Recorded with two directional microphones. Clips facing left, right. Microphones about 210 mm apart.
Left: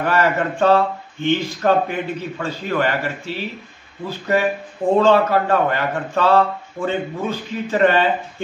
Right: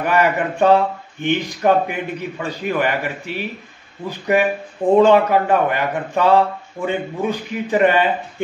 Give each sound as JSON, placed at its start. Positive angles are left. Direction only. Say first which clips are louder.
{"t": 0.0, "sound": "a man's voice", "louder": "right 1 dB", "side_deg": -15}